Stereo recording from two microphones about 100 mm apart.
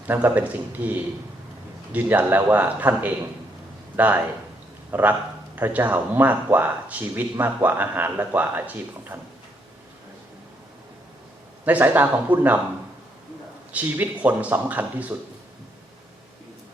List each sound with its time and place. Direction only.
0.1 s a man's voice: 20° right (ahead or behind)
11.6 s speech: 15° right (ahead or behind)
13.7 s speech: 15° right (ahead or behind)